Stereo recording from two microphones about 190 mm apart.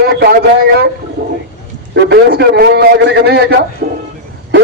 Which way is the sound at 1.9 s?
60° right (ahead or behind).